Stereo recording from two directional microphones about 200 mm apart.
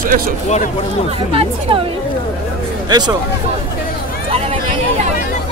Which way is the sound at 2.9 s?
20° right (ahead or behind).